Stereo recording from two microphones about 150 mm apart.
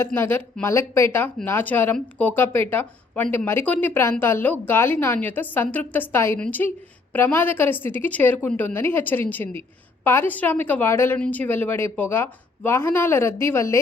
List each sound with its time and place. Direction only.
0.0 s a woman's voice: 15° left (ahead or behind)